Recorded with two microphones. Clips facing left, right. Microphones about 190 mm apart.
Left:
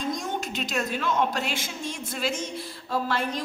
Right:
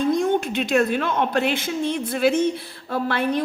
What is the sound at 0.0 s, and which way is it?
A woman's voice, 60° right (ahead or behind).